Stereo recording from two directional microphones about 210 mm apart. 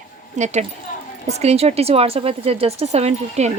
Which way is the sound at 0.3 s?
35° right (ahead or behind).